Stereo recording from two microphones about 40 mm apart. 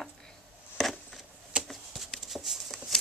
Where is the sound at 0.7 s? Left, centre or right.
Centre.